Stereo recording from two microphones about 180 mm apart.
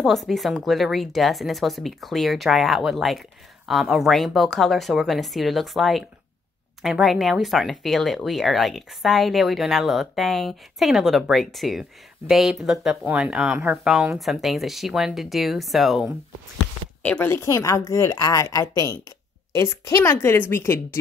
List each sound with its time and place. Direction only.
0.0 s a woman's voice: centre (ahead or behind)